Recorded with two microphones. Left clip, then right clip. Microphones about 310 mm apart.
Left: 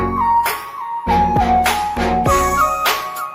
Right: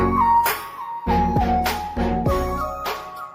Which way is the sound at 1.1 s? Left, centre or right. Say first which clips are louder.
Left 6 dB; left.